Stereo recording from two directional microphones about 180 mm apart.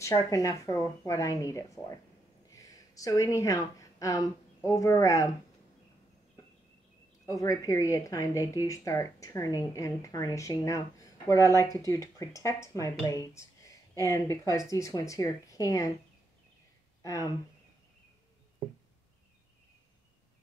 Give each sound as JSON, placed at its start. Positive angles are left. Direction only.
{"t": 0.0, "sound": "a woman's voice", "side_deg": 15}
{"t": 7.2, "sound": "a woman's voice", "side_deg": 20}
{"t": 17.0, "sound": "speech", "side_deg": 20}